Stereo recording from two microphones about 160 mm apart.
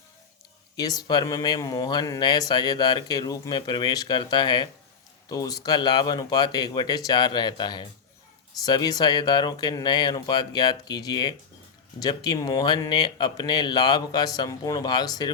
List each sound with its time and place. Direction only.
0.8 s speech: 25° left (ahead or behind)